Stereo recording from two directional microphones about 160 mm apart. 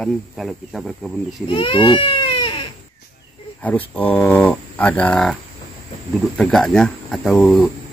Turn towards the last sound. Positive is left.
turn(degrees=0)  # may be behind; listen again after turning